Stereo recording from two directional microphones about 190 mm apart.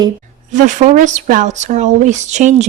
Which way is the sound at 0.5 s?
40° right (ahead or behind).